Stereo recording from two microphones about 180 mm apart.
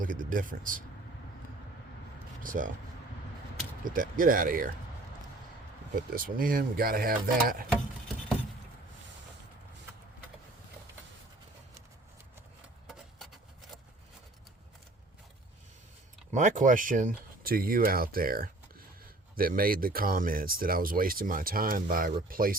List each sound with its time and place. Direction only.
0.0 s speech: 50° right (ahead or behind)
2.4 s speech: 50° right (ahead or behind)
3.8 s speech: 50° right (ahead or behind)
6.1 s speech: 50° right (ahead or behind)
12.9 s a sound: centre (ahead or behind)
16.3 s speech: 45° right (ahead or behind)